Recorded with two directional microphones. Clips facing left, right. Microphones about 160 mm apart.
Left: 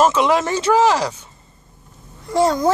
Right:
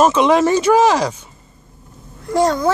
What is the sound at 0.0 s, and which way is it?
Speech, 20° right (ahead or behind).